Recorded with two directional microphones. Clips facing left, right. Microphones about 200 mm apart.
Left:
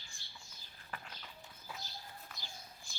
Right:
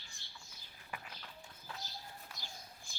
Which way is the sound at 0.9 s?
5° right (ahead or behind).